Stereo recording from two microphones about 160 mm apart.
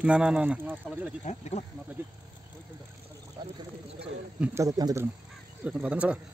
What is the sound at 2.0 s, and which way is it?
Speech, 10° right (ahead or behind).